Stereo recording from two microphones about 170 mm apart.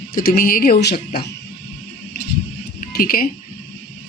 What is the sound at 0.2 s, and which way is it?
Speech, 60° left (ahead or behind).